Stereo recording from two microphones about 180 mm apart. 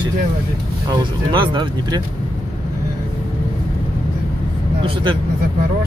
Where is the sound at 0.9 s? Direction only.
25° right (ahead or behind).